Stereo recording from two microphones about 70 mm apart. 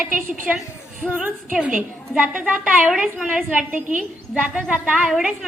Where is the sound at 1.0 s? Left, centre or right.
Centre.